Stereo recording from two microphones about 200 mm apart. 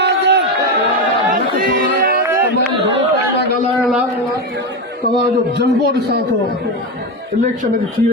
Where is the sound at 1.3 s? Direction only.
45° right (ahead or behind).